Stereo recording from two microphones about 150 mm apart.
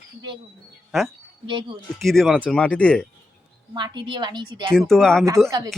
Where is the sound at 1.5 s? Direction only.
30° right (ahead or behind).